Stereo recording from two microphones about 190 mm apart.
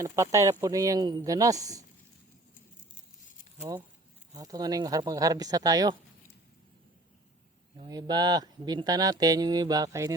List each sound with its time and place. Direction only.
0.0 s speech: 15° right (ahead or behind)
3.6 s speech: 10° right (ahead or behind)
7.8 s speech: 20° right (ahead or behind)